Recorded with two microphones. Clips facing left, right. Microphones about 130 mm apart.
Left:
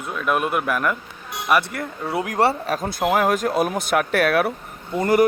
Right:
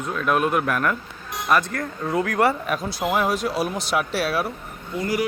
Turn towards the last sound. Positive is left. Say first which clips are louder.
# left 7 dB
turn(degrees=50)  # may be behind; listen again after turning